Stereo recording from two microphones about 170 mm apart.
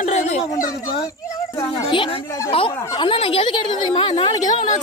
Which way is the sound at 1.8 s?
30° left (ahead or behind).